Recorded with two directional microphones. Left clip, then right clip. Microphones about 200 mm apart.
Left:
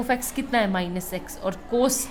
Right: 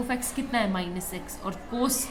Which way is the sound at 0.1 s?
40° left (ahead or behind).